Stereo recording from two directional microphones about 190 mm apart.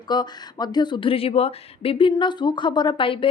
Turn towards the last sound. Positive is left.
turn(degrees=30)  # may be behind; listen again after turning